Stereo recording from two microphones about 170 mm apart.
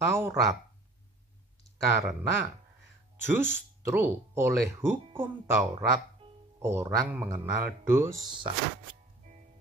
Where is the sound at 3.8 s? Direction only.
15° right (ahead or behind).